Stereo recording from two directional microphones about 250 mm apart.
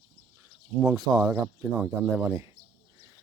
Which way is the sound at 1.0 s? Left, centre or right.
Centre.